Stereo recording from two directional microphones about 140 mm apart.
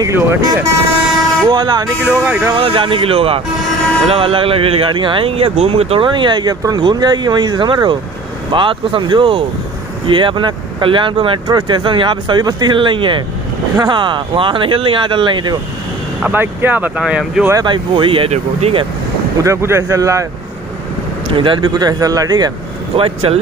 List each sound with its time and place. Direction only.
0.0 s speech: 20° right (ahead or behind)
1.5 s speech: 30° right (ahead or behind)
2.0 s speech: 10° right (ahead or behind)
2.5 s speech: 35° right (ahead or behind)
16.2 s speech: 15° right (ahead or behind)
17.5 s speech: 30° right (ahead or behind); by 18.9 s 45° right (ahead or behind)
19.4 s speech: 20° right (ahead or behind)
21.4 s speech: 35° right (ahead or behind)
22.9 s speech: 40° right (ahead or behind)